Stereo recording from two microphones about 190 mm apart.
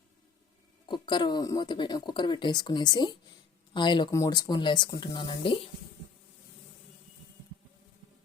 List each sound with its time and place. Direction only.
0.9 s speech: 25° left (ahead or behind)